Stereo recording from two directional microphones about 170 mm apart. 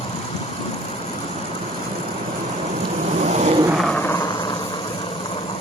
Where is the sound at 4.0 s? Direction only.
15° left (ahead or behind).